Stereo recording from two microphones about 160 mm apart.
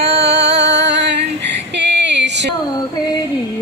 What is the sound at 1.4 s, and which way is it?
Female singing, 90° right.